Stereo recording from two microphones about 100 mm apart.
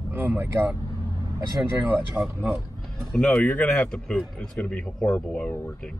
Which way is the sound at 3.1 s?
10° left (ahead or behind).